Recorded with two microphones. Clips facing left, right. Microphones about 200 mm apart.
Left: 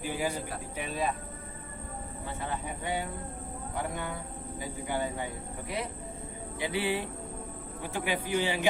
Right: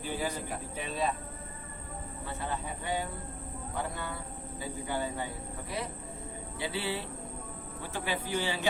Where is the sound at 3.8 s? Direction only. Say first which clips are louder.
Left 2 dB; 15° left (ahead or behind).